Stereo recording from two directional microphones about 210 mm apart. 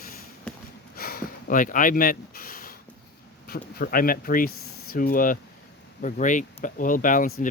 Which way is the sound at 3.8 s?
45° left (ahead or behind).